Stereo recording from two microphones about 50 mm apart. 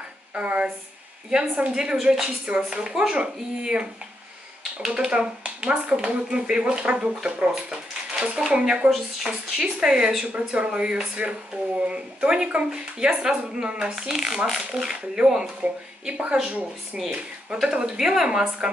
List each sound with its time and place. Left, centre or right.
0.3 s speech: right
3.6 s speech: right
10.2 s speech: right
15.6 s speech: right
17.8 s speech: centre